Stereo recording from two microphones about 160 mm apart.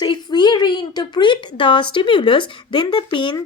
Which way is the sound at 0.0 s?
25° left (ahead or behind).